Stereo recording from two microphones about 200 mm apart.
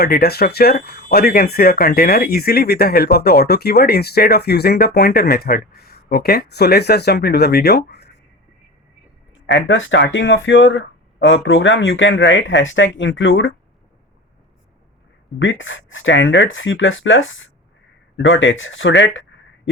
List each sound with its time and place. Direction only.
0.0 s speech: 50° left (ahead or behind)
9.5 s speech: 70° left (ahead or behind)
15.4 s speech: 70° left (ahead or behind)